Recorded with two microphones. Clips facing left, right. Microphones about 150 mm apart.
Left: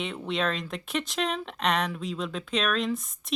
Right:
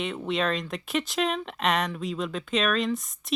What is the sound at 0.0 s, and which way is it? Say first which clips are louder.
Speech: right 2 dB; centre (ahead or behind).